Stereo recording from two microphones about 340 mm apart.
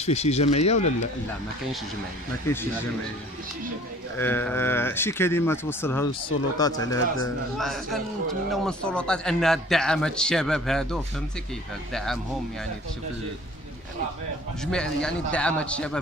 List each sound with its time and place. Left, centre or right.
0.0 s speech: centre
2.4 s speech: centre
4.2 s a man's voice: centre
14.6 s a man's voice: centre